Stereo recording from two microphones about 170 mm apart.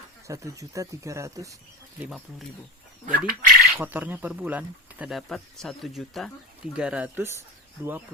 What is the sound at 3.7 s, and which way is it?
Speech, 10° right (ahead or behind).